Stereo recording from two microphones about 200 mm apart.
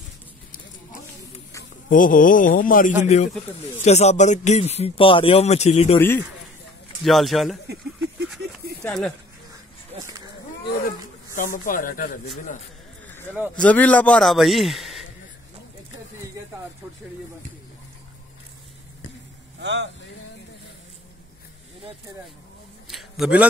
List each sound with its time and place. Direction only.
1.9 s speech: 40° left (ahead or behind)
3.0 s speech: 35° left (ahead or behind)
5.9 s a man's voice: 10° left (ahead or behind)
7.0 s a man's voice: centre (ahead or behind)
8.8 s a man's voice: centre (ahead or behind)
9.9 s a sound: 20° right (ahead or behind)
11.3 s speech: 40° left (ahead or behind)
13.0 s a sound: 10° left (ahead or behind)
13.6 s a man's voice: 5° left (ahead or behind)
19.6 s speech: 60° right (ahead or behind)
22.8 s a sound: centre (ahead or behind)